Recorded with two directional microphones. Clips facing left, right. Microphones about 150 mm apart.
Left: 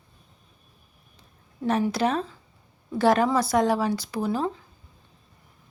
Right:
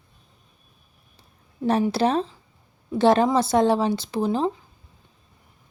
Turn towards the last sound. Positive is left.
turn(degrees=-25)  # may be behind; listen again after turning